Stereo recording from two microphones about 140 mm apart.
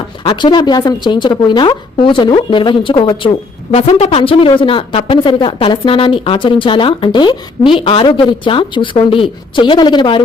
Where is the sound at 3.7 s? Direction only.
50° left (ahead or behind).